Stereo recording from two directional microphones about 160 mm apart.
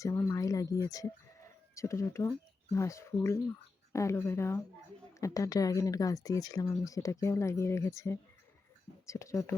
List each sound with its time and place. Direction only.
0.0 s speech: 15° left (ahead or behind)